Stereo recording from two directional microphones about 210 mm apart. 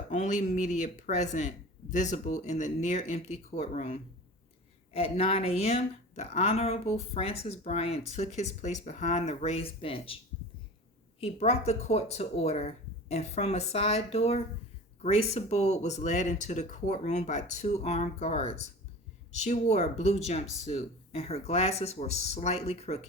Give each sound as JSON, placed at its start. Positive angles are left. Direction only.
{"t": 0.1, "sound": "a woman's voice", "side_deg": 35}
{"t": 11.2, "sound": "a woman's voice", "side_deg": 30}